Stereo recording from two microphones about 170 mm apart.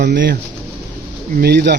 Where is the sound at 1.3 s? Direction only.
75° right (ahead or behind).